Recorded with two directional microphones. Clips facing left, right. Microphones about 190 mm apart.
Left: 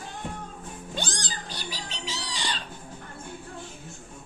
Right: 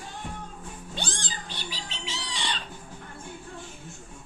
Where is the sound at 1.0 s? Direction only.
40° left (ahead or behind).